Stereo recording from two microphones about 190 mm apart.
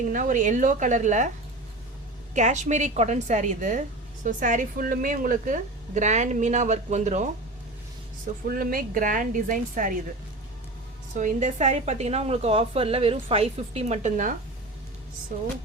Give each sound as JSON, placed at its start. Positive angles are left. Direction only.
{"t": 0.1, "sound": "a woman's voice", "side_deg": -45}
{"t": 2.3, "sound": "a woman's voice", "side_deg": -40}
{"t": 8.4, "sound": "a woman's voice", "side_deg": -50}
{"t": 11.1, "sound": "a woman's voice", "side_deg": -40}